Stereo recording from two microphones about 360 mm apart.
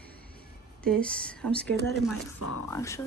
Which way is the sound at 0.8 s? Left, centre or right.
Centre.